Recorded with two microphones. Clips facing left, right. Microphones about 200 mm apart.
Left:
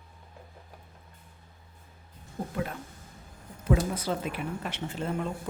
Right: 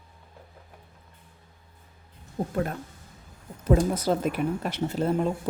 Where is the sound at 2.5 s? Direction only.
45° right (ahead or behind).